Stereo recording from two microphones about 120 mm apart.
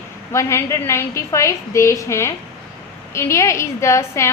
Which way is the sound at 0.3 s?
25° left (ahead or behind).